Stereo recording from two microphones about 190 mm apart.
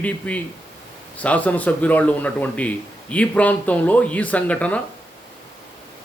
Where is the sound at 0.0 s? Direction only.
5° left (ahead or behind).